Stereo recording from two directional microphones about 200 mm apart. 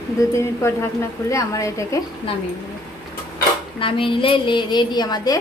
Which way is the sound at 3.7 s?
25° left (ahead or behind).